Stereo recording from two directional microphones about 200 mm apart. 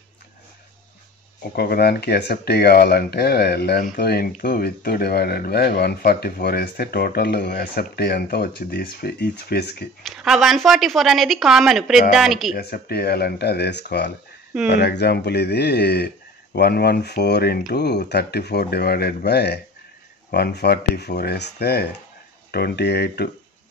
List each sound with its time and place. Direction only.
1.5 s speech: 50° left (ahead or behind)
10.0 s a woman's voice: centre (ahead or behind)
12.5 s speech: 50° left (ahead or behind)